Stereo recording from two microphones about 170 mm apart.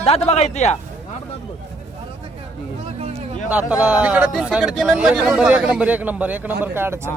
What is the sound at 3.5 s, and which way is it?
Speech, 5° right (ahead or behind).